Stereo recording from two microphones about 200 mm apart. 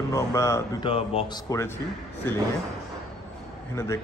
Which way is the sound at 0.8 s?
25° left (ahead or behind).